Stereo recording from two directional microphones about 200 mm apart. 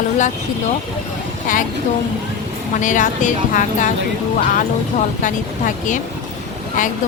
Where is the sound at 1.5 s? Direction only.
40° left (ahead or behind).